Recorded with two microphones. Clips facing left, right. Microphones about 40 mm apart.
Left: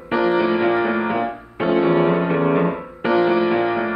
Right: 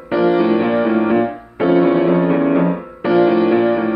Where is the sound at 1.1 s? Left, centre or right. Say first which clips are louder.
Right 5 dB; centre.